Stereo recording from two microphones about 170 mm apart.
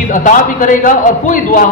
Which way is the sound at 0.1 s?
50° left (ahead or behind).